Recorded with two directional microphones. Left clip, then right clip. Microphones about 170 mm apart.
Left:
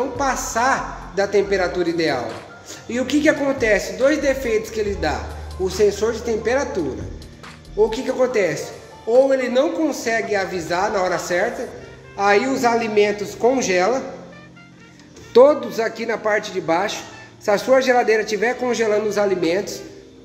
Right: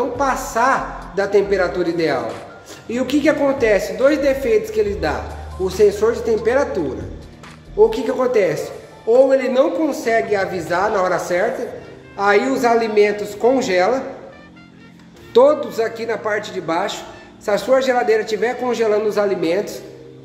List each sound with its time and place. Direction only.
0.2 s a man's voice: centre (ahead or behind)
7.9 s a man's voice: centre (ahead or behind); by 14.0 s 20° left (ahead or behind)
15.3 s a man's voice: 25° left (ahead or behind); by 19.7 s 10° left (ahead or behind)